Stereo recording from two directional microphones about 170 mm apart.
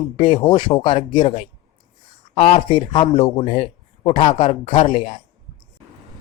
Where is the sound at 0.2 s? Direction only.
30° left (ahead or behind).